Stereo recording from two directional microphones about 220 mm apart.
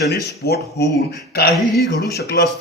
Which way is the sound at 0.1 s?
45° left (ahead or behind).